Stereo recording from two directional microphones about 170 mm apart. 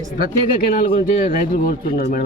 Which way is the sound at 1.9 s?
60° left (ahead or behind).